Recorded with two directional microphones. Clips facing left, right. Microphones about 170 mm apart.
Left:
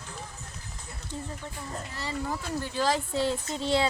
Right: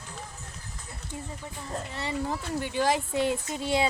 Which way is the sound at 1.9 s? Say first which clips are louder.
Right 2 dB; 25° right (ahead or behind).